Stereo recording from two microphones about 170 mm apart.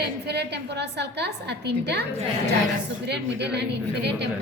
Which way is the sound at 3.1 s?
80° right.